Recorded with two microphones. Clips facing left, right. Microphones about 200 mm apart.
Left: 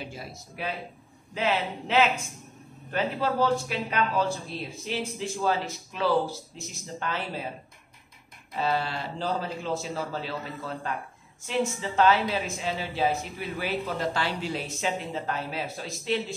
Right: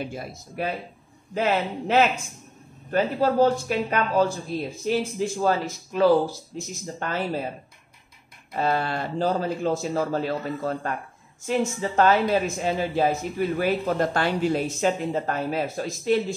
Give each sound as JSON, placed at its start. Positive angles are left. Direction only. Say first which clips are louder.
{"t": 0.0, "sound": "speech", "louder": "right 6 dB", "side_deg": -50}
{"t": 8.5, "sound": "speech", "louder": "right 3 dB", "side_deg": -50}